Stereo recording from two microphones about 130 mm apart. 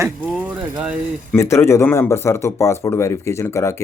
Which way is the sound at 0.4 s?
5° right (ahead or behind).